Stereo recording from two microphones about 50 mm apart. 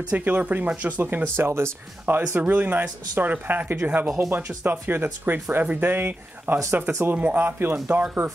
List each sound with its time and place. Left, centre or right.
0.1 s speech: right
1.2 s speech: right
2.0 s speech: right
6.7 s speech: right
7.2 s speech: right
7.7 s speech: right